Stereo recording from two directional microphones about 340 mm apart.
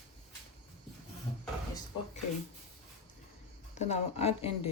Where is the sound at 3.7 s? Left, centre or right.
Centre.